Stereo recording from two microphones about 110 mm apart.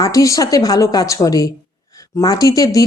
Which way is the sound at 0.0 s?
30° left (ahead or behind).